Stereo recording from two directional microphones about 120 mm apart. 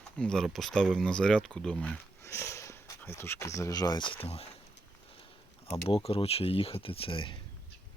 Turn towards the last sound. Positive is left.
turn(degrees=45)  # may be behind; listen again after turning